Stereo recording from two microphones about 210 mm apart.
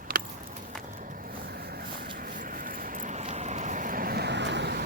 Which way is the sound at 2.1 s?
40° right (ahead or behind).